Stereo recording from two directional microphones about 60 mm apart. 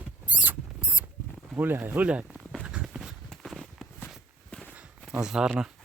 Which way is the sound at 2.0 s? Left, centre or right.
Right.